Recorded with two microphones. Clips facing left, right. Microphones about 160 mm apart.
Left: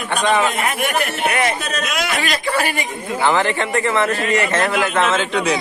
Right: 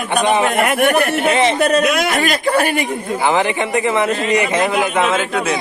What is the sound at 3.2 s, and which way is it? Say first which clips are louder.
Speech: right 1 dB; 15° right (ahead or behind).